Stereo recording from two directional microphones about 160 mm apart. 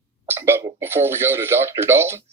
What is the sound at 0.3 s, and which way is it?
Speech, 15° right (ahead or behind).